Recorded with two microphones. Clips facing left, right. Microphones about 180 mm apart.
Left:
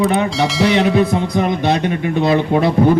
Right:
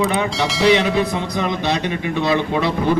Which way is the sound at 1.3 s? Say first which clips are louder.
Left 4 dB; 50° left (ahead or behind).